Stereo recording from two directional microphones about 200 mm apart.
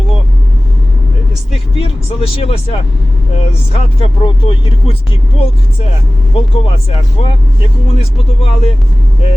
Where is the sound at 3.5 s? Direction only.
30° left (ahead or behind).